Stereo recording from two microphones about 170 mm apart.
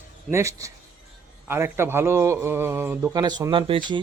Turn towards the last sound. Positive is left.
turn(degrees=-30)  # may be behind; listen again after turning